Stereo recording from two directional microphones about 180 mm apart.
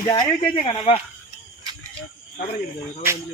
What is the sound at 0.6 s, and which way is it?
Speech, 30° left (ahead or behind).